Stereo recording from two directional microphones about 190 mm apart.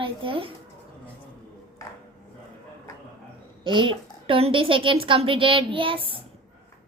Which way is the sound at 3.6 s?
25° right (ahead or behind).